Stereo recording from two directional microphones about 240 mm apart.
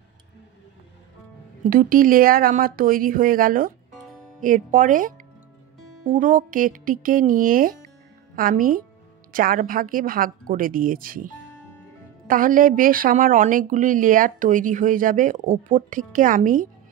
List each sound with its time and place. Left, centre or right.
1.6 s speech: right